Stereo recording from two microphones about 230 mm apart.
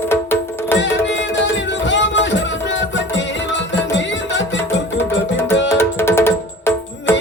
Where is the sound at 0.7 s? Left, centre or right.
Left.